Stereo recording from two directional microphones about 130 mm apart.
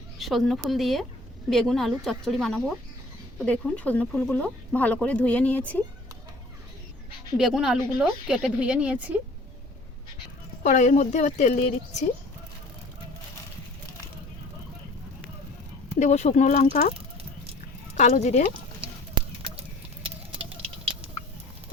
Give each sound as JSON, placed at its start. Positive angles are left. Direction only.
{"t": 0.2, "sound": "speech", "side_deg": 0}
{"t": 7.3, "sound": "speech", "side_deg": -5}
{"t": 10.6, "sound": "a woman's voice", "side_deg": 60}
{"t": 16.0, "sound": "a woman's voice", "side_deg": 60}
{"t": 17.9, "sound": "speech", "side_deg": 60}
{"t": 18.8, "sound": "a sound", "side_deg": -45}